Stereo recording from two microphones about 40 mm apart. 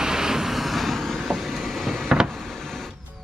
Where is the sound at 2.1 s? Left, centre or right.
Centre.